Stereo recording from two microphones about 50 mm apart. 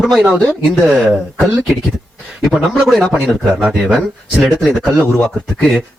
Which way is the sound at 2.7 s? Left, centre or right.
Centre.